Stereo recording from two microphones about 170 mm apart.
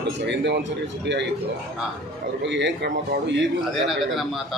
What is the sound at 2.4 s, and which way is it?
A man's voice, 90° right.